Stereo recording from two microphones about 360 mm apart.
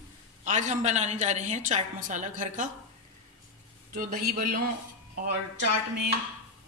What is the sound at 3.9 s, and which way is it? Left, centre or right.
Speech, right.